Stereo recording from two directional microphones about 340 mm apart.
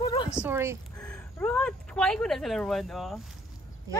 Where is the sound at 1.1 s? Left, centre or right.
Centre.